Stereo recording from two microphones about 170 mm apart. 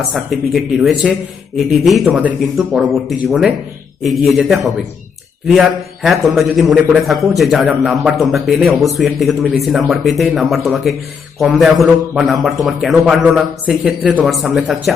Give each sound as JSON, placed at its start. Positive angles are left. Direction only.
{"t": 0.1, "sound": "a man's voice", "side_deg": 0}